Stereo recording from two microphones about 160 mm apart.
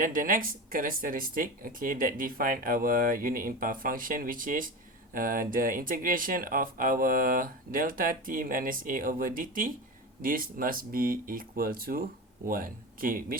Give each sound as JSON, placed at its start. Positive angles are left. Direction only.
{"t": 0.0, "sound": "speech", "side_deg": -55}